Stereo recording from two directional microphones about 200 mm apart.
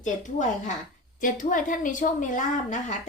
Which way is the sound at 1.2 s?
40° left (ahead or behind).